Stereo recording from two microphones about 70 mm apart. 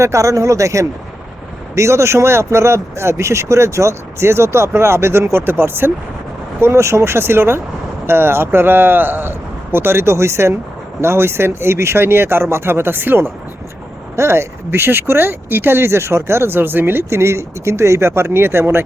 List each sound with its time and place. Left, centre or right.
0.0 s speech: right